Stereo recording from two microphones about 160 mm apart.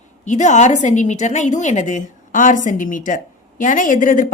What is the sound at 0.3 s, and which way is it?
A woman's voice, 50° left (ahead or behind).